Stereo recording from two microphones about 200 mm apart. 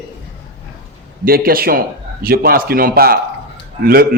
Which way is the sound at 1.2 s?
50° right (ahead or behind).